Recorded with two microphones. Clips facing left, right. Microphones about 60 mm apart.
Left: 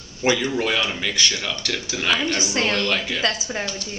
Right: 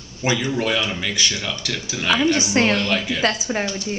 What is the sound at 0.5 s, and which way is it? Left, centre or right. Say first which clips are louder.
Speech: right 1 dB; centre.